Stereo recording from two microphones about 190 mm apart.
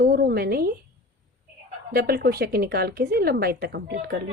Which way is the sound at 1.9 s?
55° right (ahead or behind).